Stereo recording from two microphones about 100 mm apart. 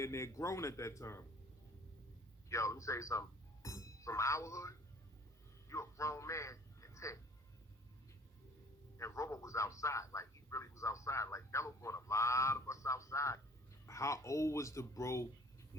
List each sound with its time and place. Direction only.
0.0 s a man's voice: 30° left (ahead or behind)
2.5 s a man's voice: 30° left (ahead or behind)
9.0 s a man's voice: 30° left (ahead or behind)